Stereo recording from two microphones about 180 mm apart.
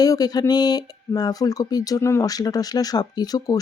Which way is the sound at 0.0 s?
20° left (ahead or behind).